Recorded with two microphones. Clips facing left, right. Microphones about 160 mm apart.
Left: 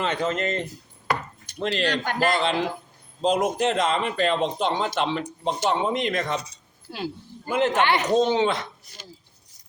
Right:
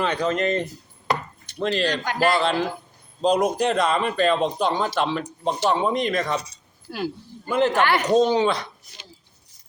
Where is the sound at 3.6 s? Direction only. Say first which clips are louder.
Right 2 dB; 20° left (ahead or behind).